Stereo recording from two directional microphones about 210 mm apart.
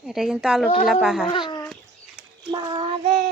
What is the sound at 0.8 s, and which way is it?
Speech, centre (ahead or behind).